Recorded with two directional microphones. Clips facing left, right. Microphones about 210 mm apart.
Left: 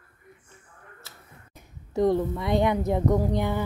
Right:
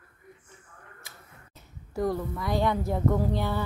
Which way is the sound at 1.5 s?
20° left (ahead or behind).